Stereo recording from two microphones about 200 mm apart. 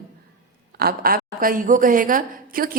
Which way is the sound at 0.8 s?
50° right (ahead or behind).